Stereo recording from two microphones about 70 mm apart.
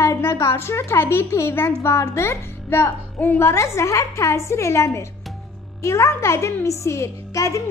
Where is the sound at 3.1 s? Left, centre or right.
Left.